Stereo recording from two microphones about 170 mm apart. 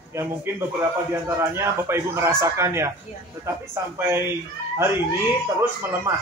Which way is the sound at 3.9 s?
15° right (ahead or behind).